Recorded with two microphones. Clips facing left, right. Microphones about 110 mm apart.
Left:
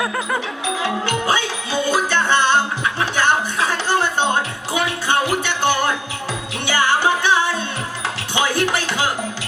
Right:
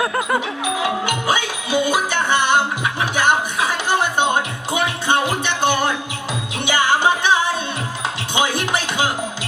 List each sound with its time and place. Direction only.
0.8 s music: 15° right (ahead or behind)